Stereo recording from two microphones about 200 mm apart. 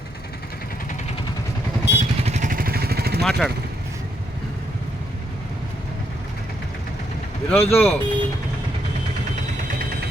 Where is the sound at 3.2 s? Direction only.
5° left (ahead or behind).